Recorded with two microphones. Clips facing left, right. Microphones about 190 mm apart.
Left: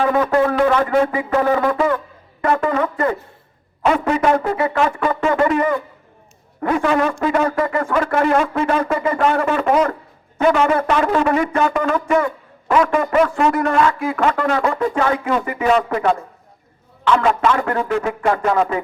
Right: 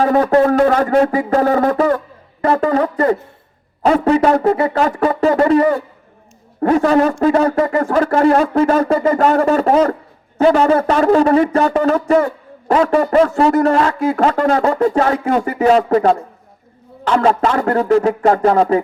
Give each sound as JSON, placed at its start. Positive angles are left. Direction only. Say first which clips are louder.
{"t": 0.0, "sound": "speech", "louder": "right 4 dB", "side_deg": -40}